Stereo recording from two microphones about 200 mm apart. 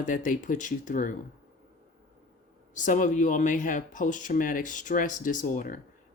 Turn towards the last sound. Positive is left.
turn(degrees=40)  # may be behind; listen again after turning